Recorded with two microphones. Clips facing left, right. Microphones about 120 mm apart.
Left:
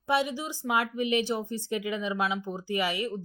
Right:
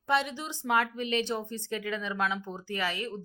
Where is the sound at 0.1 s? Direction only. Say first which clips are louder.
Left 2 dB; 5° left (ahead or behind).